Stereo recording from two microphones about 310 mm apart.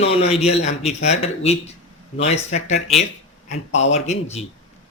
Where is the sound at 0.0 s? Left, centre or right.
Centre.